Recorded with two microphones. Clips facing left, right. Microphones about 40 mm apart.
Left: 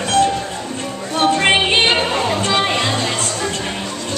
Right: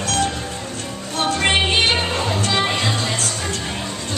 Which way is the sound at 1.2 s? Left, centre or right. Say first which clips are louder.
Left 4 dB; left.